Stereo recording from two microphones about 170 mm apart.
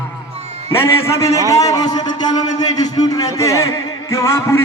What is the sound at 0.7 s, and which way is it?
A man's voice, 15° left (ahead or behind).